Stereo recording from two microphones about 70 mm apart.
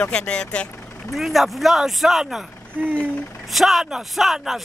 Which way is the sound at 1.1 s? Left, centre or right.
Centre.